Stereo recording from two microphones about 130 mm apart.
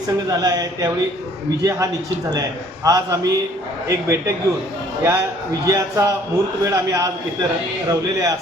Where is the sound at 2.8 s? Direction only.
25° right (ahead or behind).